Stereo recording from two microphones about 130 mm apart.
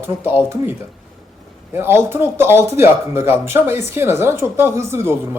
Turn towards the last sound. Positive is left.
turn(degrees=-20)  # may be behind; listen again after turning